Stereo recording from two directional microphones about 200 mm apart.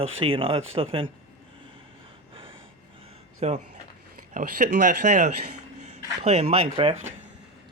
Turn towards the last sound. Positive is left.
turn(degrees=-35)  # may be behind; listen again after turning